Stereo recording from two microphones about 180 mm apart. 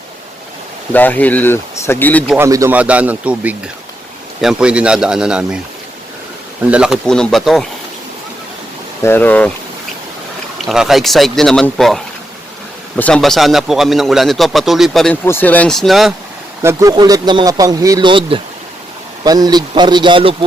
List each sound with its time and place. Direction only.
0.9 s speech: 10° left (ahead or behind)
2.2 s a man's voice: 5° right (ahead or behind)
6.7 s speech: 5° right (ahead or behind)
9.0 s speech: 10° left (ahead or behind)
10.7 s speech: centre (ahead or behind)
16.6 s speech: 20° right (ahead or behind)